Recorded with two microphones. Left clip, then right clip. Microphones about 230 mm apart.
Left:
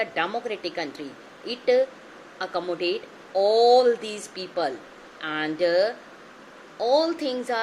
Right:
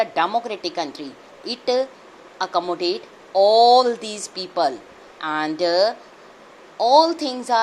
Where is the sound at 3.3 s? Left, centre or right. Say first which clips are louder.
Right 6 dB; right.